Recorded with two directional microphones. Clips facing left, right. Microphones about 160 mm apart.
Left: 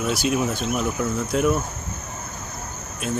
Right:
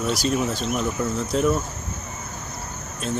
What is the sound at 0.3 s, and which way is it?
Speech, 5° left (ahead or behind).